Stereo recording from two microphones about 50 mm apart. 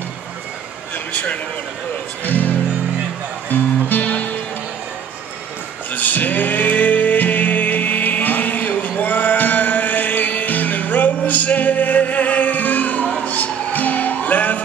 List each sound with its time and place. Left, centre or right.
1.1 s a man's voice: left
3.4 s music: left
5.9 s music: left